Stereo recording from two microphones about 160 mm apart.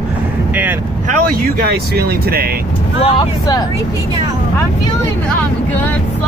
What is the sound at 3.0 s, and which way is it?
Speech, 35° left (ahead or behind).